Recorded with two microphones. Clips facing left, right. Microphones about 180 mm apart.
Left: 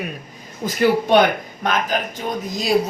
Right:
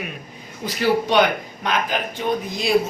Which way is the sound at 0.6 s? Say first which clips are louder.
Left 3 dB; 50° left (ahead or behind).